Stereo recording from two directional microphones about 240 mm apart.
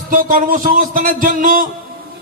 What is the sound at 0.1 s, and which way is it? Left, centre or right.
A man's voice, right.